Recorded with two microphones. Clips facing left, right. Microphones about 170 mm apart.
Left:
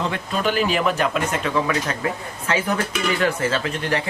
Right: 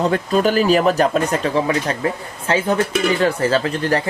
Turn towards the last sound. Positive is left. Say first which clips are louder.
# right 5 dB
turn(degrees=-35)  # may be behind; listen again after turning